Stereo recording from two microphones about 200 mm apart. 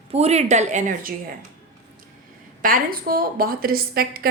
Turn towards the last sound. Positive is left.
turn(degrees=-50)  # may be behind; listen again after turning